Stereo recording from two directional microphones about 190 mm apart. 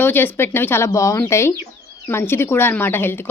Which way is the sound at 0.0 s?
10° left (ahead or behind).